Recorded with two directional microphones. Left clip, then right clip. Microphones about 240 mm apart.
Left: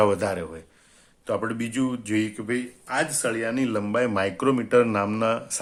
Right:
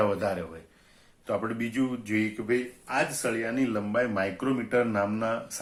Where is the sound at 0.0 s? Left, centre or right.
Left.